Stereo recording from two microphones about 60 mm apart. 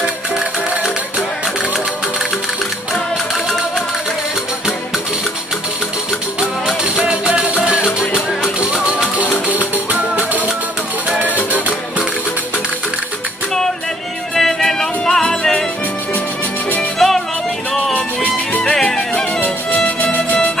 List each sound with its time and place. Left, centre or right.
6.8 s music: centre
9.8 s music: right
14.3 s music: centre
17.0 s music: centre
17.9 s music: left
18.6 s music: centre